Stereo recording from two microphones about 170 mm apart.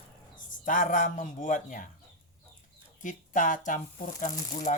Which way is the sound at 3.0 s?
50° left (ahead or behind).